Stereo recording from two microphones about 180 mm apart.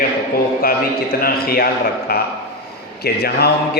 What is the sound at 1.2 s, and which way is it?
A man's voice, 55° left (ahead or behind).